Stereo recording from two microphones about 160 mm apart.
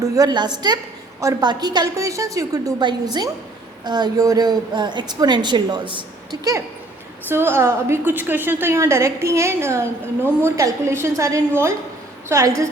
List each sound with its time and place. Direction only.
0.0 s a woman's voice: 25° right (ahead or behind)
7.3 s a woman's voice: 15° right (ahead or behind)